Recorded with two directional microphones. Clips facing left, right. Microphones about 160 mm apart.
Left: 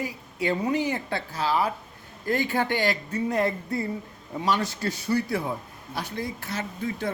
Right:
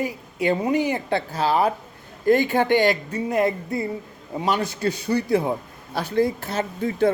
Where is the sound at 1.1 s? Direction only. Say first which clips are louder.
Right 5 dB; 30° right (ahead or behind).